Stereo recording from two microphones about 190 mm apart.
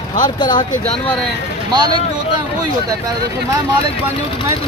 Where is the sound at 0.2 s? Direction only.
25° left (ahead or behind).